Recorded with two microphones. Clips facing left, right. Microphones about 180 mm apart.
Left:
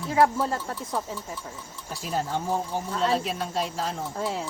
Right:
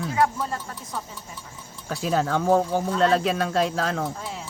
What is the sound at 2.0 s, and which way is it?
Speech, 90° right.